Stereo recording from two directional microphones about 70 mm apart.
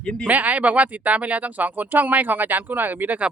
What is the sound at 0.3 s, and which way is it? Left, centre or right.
Speech, right.